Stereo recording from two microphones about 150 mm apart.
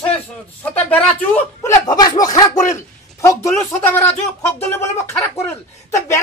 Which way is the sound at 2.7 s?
20° left (ahead or behind).